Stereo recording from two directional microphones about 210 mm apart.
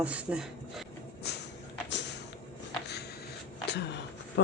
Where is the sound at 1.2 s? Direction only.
50° left (ahead or behind).